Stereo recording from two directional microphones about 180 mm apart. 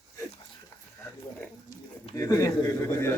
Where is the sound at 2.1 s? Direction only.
15° left (ahead or behind).